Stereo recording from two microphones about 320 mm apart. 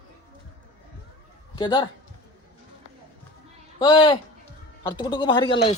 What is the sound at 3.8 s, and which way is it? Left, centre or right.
Speech, centre.